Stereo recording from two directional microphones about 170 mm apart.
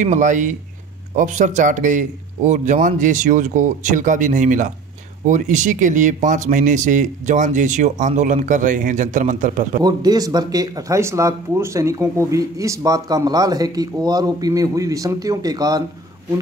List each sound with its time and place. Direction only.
0.0 s speech: 45° right (ahead or behind)
9.8 s speech: 25° right (ahead or behind)